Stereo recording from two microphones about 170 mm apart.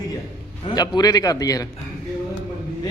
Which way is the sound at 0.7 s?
25° left (ahead or behind).